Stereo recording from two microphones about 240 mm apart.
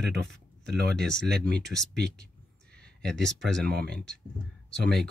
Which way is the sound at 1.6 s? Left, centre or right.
Centre.